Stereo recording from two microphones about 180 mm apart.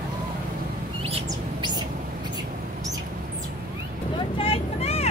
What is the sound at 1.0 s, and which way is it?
Chirp, 30° right (ahead or behind).